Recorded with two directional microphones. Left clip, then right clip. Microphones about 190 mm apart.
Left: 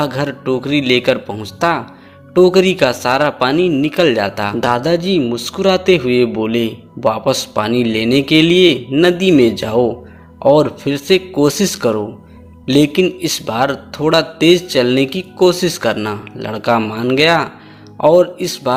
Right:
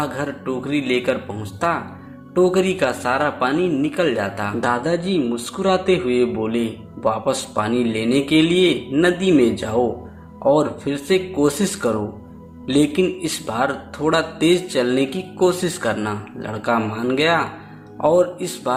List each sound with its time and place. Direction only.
0.0 s speech: 45° left (ahead or behind)